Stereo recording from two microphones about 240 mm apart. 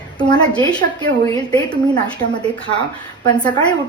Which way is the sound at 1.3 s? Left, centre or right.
Centre.